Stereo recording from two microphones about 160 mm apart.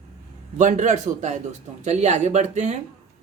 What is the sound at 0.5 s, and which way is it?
Speech, 50° right (ahead or behind).